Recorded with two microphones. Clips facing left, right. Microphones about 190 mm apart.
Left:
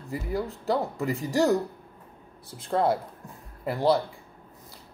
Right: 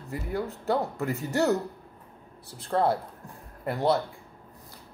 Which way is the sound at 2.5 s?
15° left (ahead or behind).